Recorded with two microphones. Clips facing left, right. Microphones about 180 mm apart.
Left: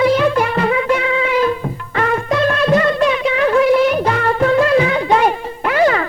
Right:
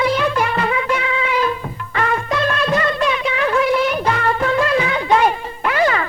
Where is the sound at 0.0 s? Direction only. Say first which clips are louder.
Left 4 dB; 45° left (ahead or behind).